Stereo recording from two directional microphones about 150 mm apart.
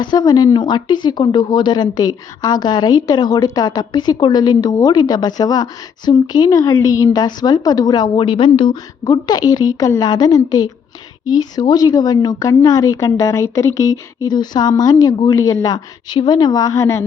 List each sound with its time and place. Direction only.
0.0 s a woman's voice: 30° left (ahead or behind)